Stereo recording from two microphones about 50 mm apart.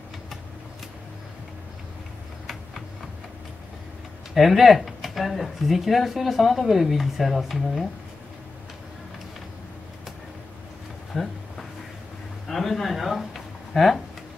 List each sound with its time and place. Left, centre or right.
4.3 s speech: centre
11.1 s speech: centre
12.4 s a sound: centre